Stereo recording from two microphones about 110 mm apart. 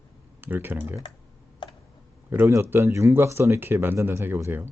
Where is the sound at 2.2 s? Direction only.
20° right (ahead or behind).